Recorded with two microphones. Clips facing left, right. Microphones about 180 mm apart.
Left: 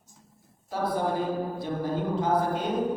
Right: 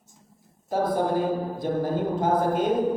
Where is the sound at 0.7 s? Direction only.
50° right (ahead or behind).